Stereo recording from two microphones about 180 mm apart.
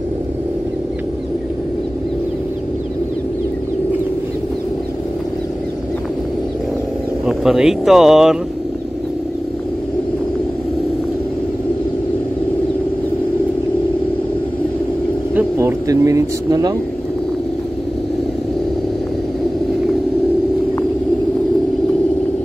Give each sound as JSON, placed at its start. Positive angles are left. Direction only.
{"t": 7.2, "sound": "speech", "side_deg": 0}
{"t": 15.3, "sound": "speech", "side_deg": -15}